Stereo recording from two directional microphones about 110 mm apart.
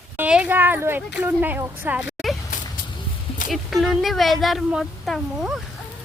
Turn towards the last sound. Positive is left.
turn(degrees=0)  # may be behind; listen again after turning